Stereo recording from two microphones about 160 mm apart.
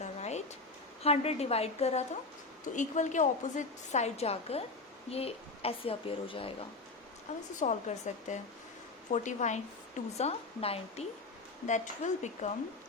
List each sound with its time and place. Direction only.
0.0 s a sound: 45° left (ahead or behind)
1.0 s a woman's voice: 40° left (ahead or behind)
7.3 s a woman's voice: 45° left (ahead or behind)